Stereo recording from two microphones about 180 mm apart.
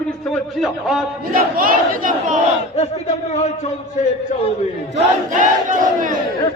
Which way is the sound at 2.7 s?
35° left (ahead or behind).